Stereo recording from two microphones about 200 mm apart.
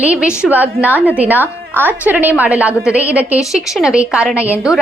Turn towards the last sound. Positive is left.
turn(degrees=-5)  # may be behind; listen again after turning